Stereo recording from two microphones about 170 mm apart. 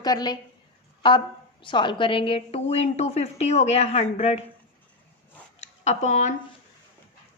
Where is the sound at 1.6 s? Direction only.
30° left (ahead or behind).